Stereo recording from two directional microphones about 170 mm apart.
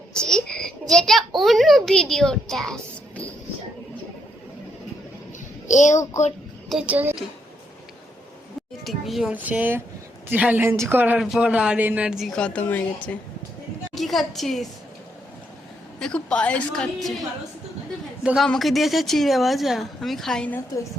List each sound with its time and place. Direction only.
0.1 s a child's voice: 5° left (ahead or behind)
5.6 s a woman's voice: 45° left (ahead or behind)
6.7 s a woman's voice: 5° right (ahead or behind)
8.8 s a woman's voice: centre (ahead or behind)
13.9 s a woman's voice: centre (ahead or behind)
16.0 s speech: 5° left (ahead or behind)